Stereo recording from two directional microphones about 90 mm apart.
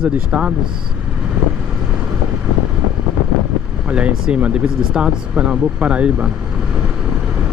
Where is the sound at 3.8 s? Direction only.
15° right (ahead or behind).